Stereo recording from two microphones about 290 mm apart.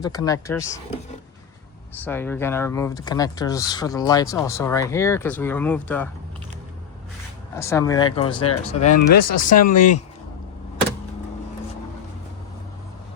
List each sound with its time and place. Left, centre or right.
0.0 s speech: centre
2.0 s speech: centre
7.5 s speech: centre
8.9 s speech: left